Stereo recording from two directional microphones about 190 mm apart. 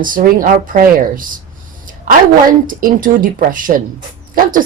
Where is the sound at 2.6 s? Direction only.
45° right (ahead or behind).